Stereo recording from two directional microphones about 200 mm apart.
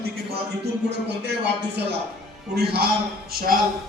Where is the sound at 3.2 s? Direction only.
45° right (ahead or behind).